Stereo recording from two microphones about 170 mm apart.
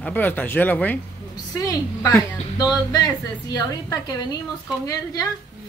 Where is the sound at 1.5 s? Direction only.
20° left (ahead or behind).